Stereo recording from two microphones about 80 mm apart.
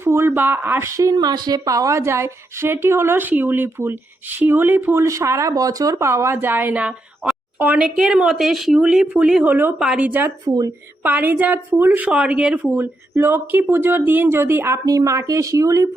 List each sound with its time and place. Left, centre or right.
0.0 s speech: right
5.0 s speech: right
9.7 s speech: centre
10.1 s speech: right
10.4 s speech: right
11.0 s speech: right
12.0 s speech: centre
12.7 s speech: right
14.8 s speech: right